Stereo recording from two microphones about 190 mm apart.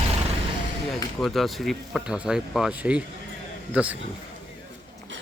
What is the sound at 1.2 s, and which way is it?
Speech, centre (ahead or behind).